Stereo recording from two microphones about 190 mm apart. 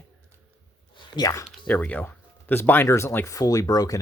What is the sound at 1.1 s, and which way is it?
Speech, 20° left (ahead or behind).